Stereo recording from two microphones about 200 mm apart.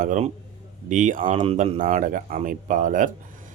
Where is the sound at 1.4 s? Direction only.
30° right (ahead or behind).